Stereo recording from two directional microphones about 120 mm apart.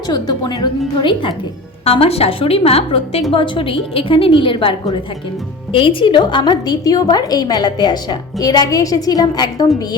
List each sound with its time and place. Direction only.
0.1 s a woman's voice: 35° left (ahead or behind)
1.8 s a woman's voice: 55° left (ahead or behind)
3.3 s a woman's voice: 45° left (ahead or behind)
5.7 s a woman's voice: 45° left (ahead or behind)